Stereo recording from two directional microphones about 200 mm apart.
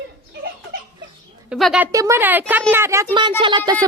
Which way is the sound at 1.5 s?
Centre (ahead or behind).